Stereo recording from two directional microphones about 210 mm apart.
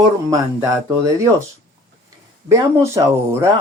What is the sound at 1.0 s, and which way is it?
Speech, 15° right (ahead or behind).